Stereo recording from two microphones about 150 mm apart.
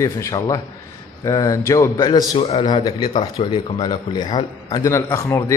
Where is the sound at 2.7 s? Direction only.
30° left (ahead or behind).